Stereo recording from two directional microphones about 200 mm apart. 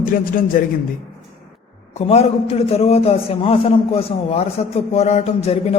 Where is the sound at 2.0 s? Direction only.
30° left (ahead or behind).